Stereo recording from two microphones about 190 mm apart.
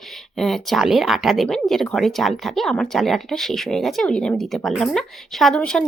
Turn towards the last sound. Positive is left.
turn(degrees=5)  # may be behind; listen again after turning